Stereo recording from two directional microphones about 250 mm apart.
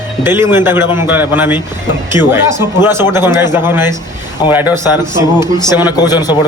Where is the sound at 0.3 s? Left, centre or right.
Centre.